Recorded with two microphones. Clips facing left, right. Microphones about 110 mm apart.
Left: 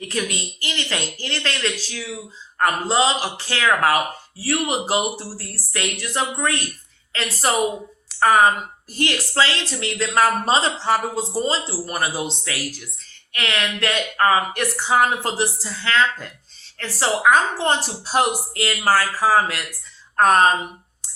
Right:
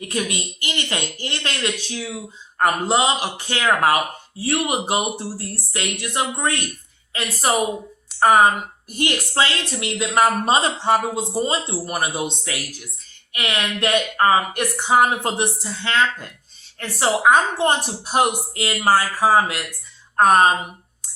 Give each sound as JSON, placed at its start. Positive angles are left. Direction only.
{"t": 0.0, "sound": "a woman's voice", "side_deg": -25}
{"t": 8.9, "sound": "a woman's voice", "side_deg": -20}